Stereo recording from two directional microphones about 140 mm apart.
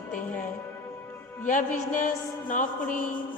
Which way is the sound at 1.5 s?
65° left (ahead or behind).